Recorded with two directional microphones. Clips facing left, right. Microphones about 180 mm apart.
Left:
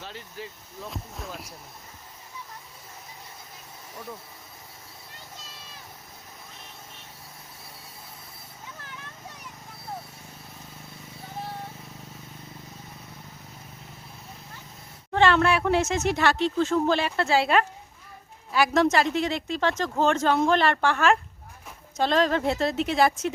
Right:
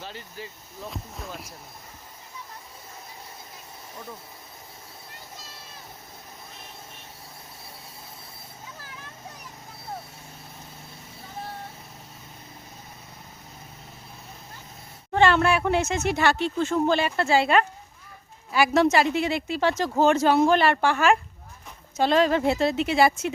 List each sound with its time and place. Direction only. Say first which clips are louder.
0.0 s speech: even; centre (ahead or behind)
15.1 s speech: right 1 dB; 5° right (ahead or behind)